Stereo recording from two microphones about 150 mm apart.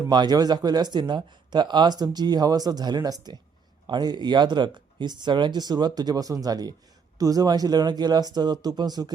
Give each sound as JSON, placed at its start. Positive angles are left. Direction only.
{"t": 0.1, "sound": "speech", "side_deg": -30}